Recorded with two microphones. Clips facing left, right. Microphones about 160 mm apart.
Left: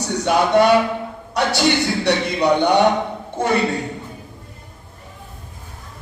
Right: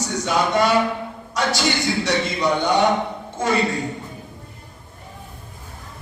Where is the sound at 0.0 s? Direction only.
65° left (ahead or behind).